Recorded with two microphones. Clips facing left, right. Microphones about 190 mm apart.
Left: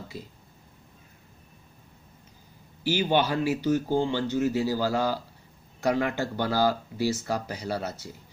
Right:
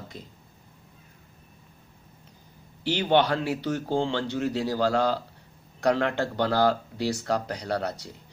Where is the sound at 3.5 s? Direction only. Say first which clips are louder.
Left 3 dB; 70° right (ahead or behind).